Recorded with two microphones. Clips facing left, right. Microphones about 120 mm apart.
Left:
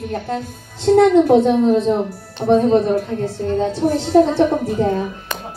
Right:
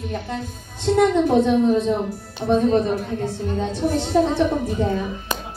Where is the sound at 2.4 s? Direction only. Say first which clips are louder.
Left 5 dB; 40° left (ahead or behind).